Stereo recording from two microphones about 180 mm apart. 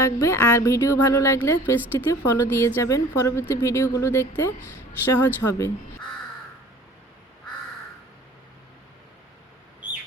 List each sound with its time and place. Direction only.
0.0 s speech: 15° left (ahead or behind)